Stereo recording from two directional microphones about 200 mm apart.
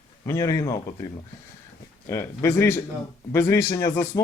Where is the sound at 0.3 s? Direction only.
15° left (ahead or behind).